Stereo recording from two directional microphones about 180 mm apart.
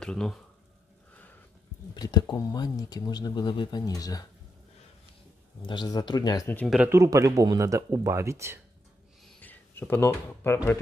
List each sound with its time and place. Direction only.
0.0 s speech: 5° left (ahead or behind)
2.0 s speech: 20° left (ahead or behind)
5.6 s speech: 25° left (ahead or behind)
6.7 s speech: 10° right (ahead or behind)
9.3 s speech: 10° left (ahead or behind)